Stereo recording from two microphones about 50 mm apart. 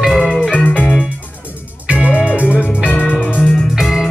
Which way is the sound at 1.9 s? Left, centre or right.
Right.